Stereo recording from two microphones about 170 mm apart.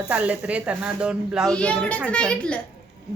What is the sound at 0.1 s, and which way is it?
A child's voice, 10° right (ahead or behind).